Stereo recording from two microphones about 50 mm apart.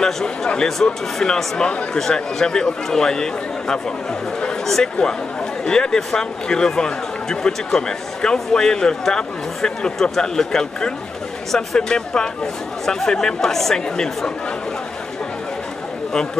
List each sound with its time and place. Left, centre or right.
0.0 s speech: centre
5.7 s speech: centre